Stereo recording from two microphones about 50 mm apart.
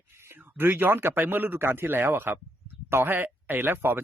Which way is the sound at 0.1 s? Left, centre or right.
Right.